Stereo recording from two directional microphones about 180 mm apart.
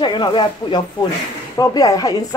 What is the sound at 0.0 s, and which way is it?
Speech, 25° left (ahead or behind).